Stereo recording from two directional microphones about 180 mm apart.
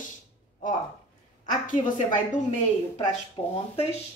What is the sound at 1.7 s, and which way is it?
Speech, 45° left (ahead or behind).